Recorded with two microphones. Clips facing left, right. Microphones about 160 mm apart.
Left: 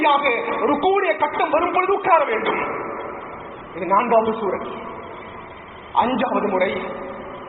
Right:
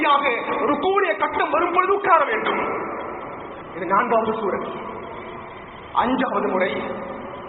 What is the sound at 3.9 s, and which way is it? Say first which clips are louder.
Speech: left 3 dB; 20° left (ahead or behind).